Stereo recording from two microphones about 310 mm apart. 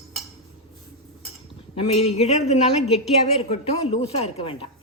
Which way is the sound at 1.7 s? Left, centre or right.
Centre.